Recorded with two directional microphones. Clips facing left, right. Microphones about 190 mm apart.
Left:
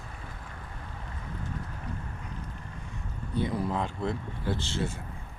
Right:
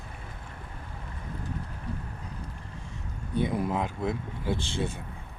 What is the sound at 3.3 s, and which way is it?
Speech, 20° right (ahead or behind).